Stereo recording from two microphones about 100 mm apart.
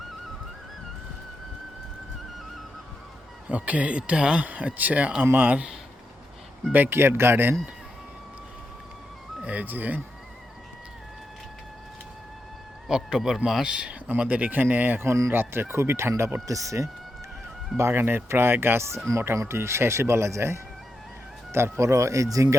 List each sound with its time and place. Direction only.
3.5 s speech: 15° right (ahead or behind)
6.7 s speech: 20° right (ahead or behind)
9.4 s speech: 15° right (ahead or behind)
12.9 s speech: 5° right (ahead or behind); by 22.5 s 35° right (ahead or behind)